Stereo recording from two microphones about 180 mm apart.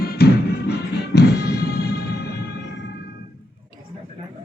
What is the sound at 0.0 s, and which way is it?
Music, 60° left (ahead or behind).